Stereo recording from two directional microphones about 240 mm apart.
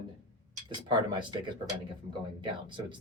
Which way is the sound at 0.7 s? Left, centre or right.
Centre.